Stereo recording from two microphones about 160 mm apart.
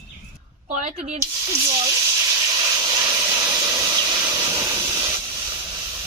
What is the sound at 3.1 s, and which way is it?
Steam, 20° right (ahead or behind).